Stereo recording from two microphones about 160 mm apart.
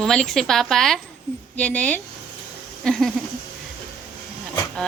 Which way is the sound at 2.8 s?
Centre (ahead or behind).